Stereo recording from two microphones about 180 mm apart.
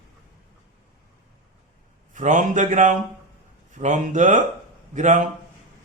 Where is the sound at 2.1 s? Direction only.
45° right (ahead or behind).